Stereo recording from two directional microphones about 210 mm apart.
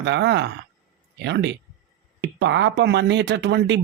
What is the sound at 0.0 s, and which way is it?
Speech, 55° right (ahead or behind).